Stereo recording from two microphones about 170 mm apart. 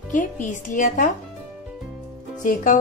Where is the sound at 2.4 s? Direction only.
50° left (ahead or behind).